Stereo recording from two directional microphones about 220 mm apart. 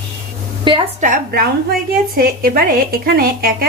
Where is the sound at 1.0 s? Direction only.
40° right (ahead or behind).